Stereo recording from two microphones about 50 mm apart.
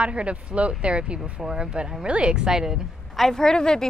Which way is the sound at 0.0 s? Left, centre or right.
Right.